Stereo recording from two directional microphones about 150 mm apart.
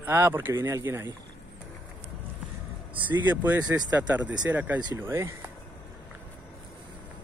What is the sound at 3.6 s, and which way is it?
Speech, 25° right (ahead or behind).